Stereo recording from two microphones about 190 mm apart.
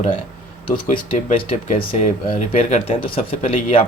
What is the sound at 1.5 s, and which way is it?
Speech, 35° left (ahead or behind).